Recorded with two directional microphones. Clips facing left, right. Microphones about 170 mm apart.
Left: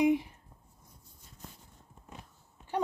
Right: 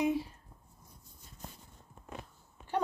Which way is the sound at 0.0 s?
15° left (ahead or behind).